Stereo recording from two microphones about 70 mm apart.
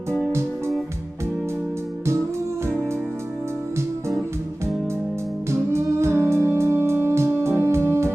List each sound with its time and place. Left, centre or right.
5.5 s music: right